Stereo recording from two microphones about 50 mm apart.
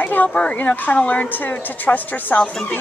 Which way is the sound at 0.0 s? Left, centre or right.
Left.